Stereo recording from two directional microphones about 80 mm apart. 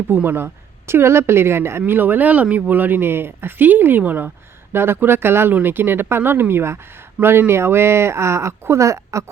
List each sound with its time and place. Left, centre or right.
0.1 s speech: right